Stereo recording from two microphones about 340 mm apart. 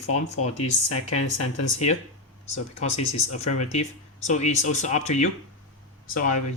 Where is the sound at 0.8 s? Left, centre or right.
Left.